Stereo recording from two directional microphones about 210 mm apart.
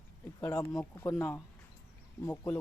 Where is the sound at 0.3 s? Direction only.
15° left (ahead or behind).